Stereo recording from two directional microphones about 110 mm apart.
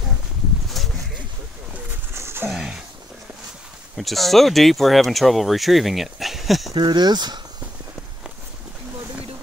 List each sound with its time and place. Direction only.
0.8 s a sound: centre (ahead or behind)
2.1 s dog: 20° right (ahead or behind)
2.5 s speech: 5° right (ahead or behind)
3.9 s speech: centre (ahead or behind)
6.7 s speech: 40° right (ahead or behind)